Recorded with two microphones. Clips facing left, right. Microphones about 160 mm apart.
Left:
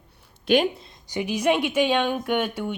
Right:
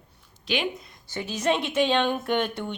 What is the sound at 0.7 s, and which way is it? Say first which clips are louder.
A woman's voice: left 4 dB; 25° left (ahead or behind).